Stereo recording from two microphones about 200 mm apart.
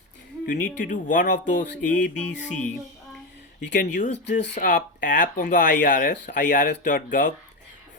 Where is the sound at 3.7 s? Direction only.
40° left (ahead or behind).